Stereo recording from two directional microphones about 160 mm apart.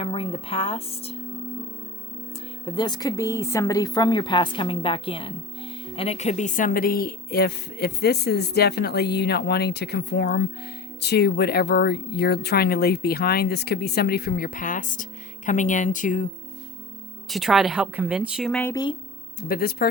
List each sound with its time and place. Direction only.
0.0 s speech: 35° left (ahead or behind)
2.6 s speech: 25° left (ahead or behind); by 16.2 s 55° left (ahead or behind)
17.2 s a woman's voice: centre (ahead or behind)
18.5 s speech: 15° left (ahead or behind)
19.4 s speech: 70° left (ahead or behind)